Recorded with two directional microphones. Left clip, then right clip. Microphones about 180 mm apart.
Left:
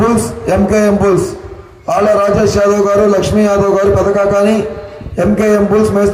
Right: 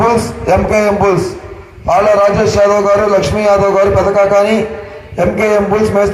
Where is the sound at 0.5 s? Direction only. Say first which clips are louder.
Right 1 dB; 60° left (ahead or behind).